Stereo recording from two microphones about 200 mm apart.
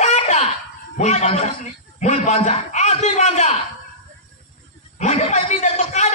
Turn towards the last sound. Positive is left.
turn(degrees=30)  # may be behind; listen again after turning